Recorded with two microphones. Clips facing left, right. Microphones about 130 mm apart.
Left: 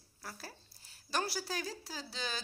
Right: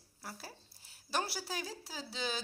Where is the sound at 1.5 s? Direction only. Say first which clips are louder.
Left 1 dB; 15° right (ahead or behind).